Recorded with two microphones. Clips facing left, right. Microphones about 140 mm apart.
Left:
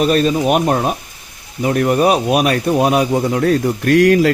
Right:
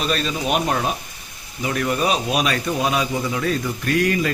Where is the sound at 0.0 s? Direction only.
50° left (ahead or behind).